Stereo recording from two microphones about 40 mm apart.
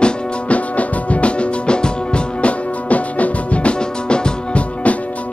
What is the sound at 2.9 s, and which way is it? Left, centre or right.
Music, left.